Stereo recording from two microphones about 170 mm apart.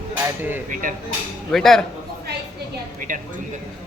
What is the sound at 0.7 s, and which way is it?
Speech, 55° right (ahead or behind).